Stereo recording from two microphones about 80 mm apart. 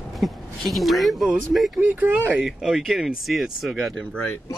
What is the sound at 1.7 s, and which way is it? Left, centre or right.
Speech, centre.